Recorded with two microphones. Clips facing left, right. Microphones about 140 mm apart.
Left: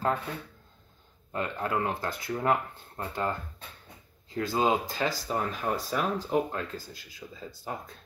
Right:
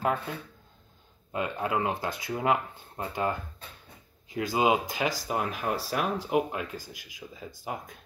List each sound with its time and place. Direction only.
1.3 s speech: 15° right (ahead or behind)